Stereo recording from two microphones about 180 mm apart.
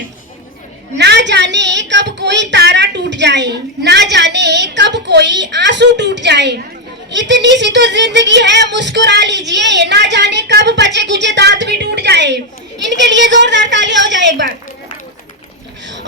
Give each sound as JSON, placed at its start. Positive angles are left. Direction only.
{"t": 0.9, "sound": "a woman's voice", "side_deg": -70}